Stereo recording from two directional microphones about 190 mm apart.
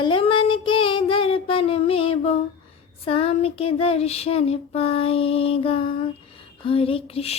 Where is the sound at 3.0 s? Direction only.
30° left (ahead or behind).